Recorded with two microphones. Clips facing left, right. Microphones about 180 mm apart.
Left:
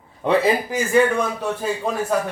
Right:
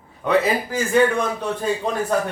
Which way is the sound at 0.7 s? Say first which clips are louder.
Right 3 dB; 5° left (ahead or behind).